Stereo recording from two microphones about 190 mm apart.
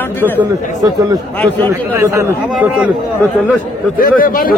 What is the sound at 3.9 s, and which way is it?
Speech, 50° left (ahead or behind).